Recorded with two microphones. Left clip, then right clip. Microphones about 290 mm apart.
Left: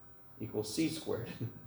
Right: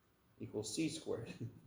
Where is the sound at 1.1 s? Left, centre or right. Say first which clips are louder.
Left 5 dB; right.